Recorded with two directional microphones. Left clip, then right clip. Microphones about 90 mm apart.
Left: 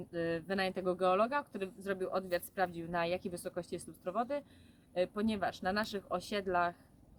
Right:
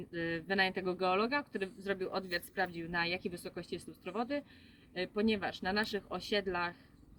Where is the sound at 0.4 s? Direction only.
35° left (ahead or behind).